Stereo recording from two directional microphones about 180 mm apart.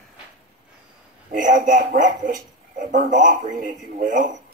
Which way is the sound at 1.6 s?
50° right (ahead or behind).